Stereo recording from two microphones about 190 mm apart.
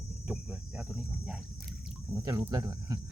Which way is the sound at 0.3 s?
5° right (ahead or behind).